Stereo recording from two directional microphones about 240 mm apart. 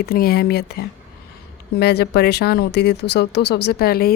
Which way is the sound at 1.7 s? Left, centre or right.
Left.